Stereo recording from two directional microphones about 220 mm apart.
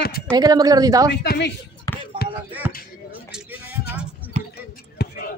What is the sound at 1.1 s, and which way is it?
Speech, 45° left (ahead or behind).